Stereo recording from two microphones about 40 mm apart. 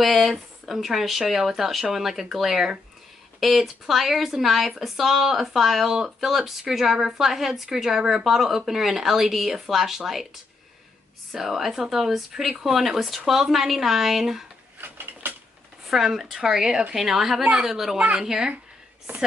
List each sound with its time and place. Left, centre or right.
0.0 s a woman's voice: centre
14.8 s a sound: right
15.9 s a woman's voice: centre
17.4 s a woman's voice: right
17.6 s a woman's voice: centre
17.9 s a woman's voice: right
18.2 s a woman's voice: centre